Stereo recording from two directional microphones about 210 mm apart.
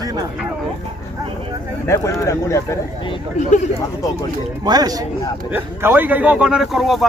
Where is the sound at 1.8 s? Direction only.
15° left (ahead or behind).